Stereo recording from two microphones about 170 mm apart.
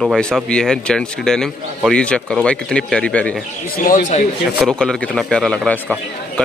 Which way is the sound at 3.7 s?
55° left (ahead or behind).